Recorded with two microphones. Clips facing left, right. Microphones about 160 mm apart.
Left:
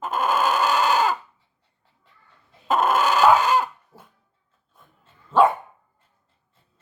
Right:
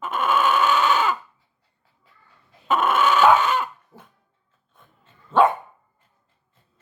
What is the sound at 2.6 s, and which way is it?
Dog, 40° left (ahead or behind).